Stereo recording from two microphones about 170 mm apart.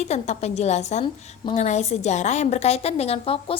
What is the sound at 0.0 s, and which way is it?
A woman's voice, 40° left (ahead or behind).